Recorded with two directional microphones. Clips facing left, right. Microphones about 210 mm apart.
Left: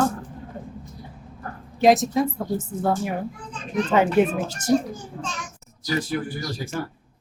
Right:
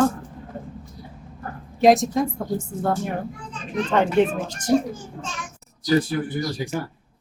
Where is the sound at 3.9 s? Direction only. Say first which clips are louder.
Even; 5° left (ahead or behind).